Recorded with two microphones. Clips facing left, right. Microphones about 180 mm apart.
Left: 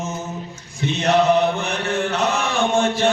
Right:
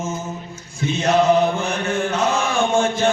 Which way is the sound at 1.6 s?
65° left (ahead or behind).